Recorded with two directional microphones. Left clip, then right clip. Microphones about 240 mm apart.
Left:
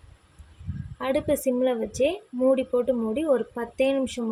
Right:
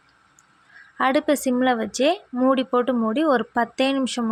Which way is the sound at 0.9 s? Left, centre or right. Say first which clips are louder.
Right 5 dB; right.